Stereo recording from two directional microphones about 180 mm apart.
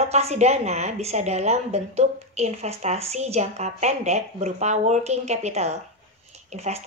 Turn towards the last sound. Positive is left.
turn(degrees=-40)  # may be behind; listen again after turning